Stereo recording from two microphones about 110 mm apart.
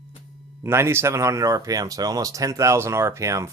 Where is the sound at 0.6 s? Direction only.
25° right (ahead or behind).